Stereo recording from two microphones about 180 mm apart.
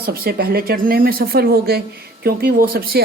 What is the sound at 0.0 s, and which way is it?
A woman's voice, 60° right (ahead or behind).